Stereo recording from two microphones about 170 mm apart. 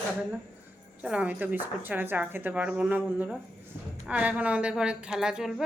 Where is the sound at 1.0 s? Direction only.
10° right (ahead or behind).